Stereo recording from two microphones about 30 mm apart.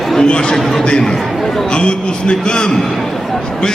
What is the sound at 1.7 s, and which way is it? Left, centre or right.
A man's voice, left.